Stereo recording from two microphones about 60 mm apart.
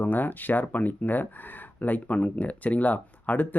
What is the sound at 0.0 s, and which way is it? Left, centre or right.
Speech, left.